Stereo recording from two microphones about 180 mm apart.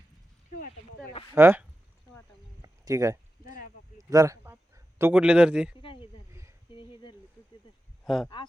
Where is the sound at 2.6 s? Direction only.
15° right (ahead or behind).